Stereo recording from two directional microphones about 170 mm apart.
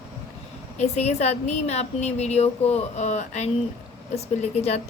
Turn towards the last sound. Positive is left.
turn(degrees=40)  # may be behind; listen again after turning